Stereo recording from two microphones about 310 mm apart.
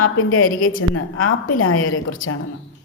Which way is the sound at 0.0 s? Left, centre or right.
Left.